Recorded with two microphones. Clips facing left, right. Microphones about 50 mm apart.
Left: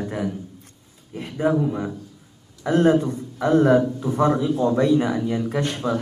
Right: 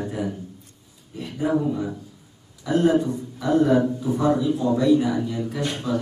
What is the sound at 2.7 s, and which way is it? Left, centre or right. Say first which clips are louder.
A man's voice: left 2 dB; left.